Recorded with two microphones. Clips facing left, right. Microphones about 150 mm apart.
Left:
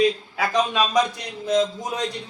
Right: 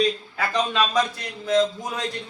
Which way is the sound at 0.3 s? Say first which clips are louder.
Right 1 dB; 10° left (ahead or behind).